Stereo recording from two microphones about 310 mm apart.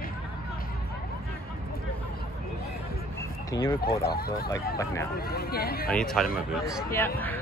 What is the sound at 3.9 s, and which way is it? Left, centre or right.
Speech, left.